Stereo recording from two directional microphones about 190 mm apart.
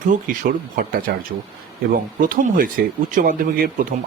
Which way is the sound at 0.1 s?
45° right (ahead or behind).